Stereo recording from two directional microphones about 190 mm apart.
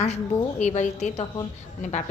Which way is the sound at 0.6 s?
35° left (ahead or behind).